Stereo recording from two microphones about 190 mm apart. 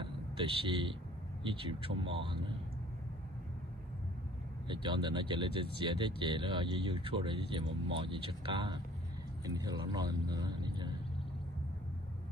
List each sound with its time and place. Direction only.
0.7 s speech: 25° right (ahead or behind)
4.6 s a man's voice: 25° right (ahead or behind)